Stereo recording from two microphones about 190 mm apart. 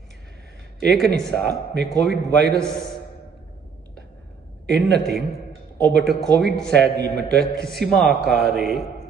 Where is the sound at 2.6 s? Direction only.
Centre (ahead or behind).